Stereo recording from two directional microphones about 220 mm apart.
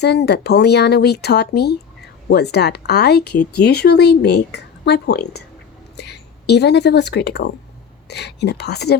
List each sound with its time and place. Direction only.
0.0 s speech: 50° left (ahead or behind)